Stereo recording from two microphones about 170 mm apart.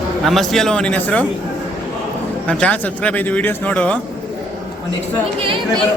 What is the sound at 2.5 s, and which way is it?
Speech, 10° left (ahead or behind).